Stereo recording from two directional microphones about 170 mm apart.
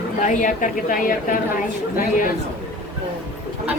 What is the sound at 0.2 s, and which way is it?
A woman's voice, 50° left (ahead or behind).